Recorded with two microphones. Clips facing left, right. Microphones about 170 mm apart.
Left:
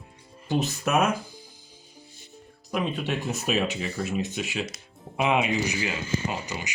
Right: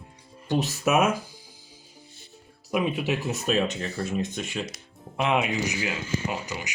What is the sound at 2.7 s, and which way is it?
Speech, 5° right (ahead or behind).